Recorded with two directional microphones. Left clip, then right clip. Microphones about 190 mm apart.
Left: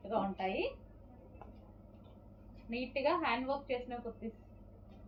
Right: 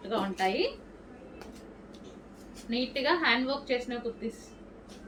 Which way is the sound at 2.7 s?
25° right (ahead or behind).